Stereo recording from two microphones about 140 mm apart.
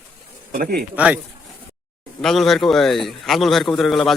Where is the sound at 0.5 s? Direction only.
90° right.